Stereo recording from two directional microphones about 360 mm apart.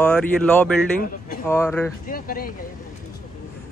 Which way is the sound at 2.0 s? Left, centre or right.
Left.